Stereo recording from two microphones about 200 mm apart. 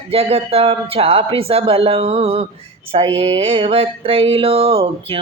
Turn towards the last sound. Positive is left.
turn(degrees=-30)  # may be behind; listen again after turning